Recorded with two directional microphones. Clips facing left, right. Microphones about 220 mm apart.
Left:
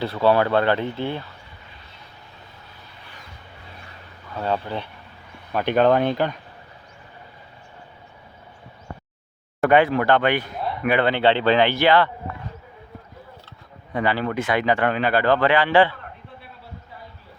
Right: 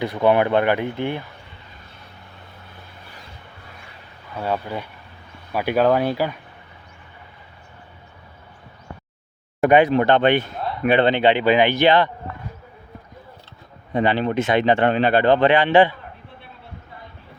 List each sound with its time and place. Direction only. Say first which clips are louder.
0.0 s speech: right 1 dB; 15° right (ahead or behind)
4.4 s speech: even; 10° right (ahead or behind)
9.6 s speech: right 2 dB; 15° right (ahead or behind)
13.9 s speech: right 3 dB; 20° right (ahead or behind)